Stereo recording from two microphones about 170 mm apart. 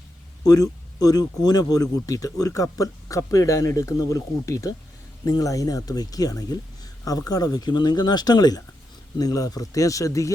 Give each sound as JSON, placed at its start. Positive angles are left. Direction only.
{"t": 0.4, "sound": "speech", "side_deg": 20}